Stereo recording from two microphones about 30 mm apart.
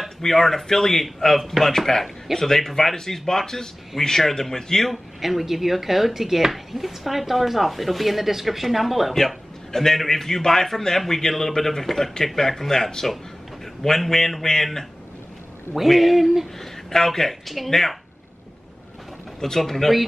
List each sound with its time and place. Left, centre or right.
0.2 s a man's voice: centre
5.2 s speech: centre
9.7 s a man's voice: centre
15.7 s speech: centre
16.5 s a man's voice: centre
19.4 s a man's voice: centre